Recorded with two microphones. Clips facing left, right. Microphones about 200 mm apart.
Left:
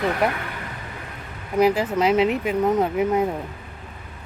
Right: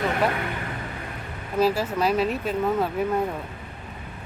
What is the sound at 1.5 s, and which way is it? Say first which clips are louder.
Speech: left 3 dB; 15° left (ahead or behind).